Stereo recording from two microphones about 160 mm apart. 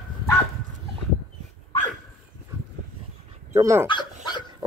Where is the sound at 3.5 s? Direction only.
20° right (ahead or behind).